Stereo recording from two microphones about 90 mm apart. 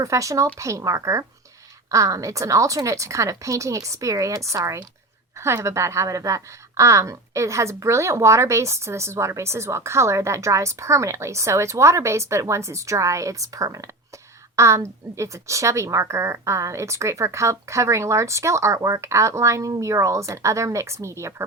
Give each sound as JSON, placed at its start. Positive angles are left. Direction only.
{"t": 0.0, "sound": "a woman's voice", "side_deg": -35}